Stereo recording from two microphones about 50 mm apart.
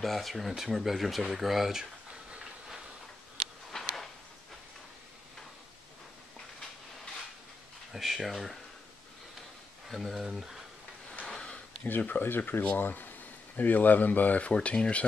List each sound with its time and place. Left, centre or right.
0.0 s speech: centre
3.7 s a sound: centre
7.9 s speech: centre
9.8 s speech: centre
11.2 s a sound: centre
12.1 s speech: left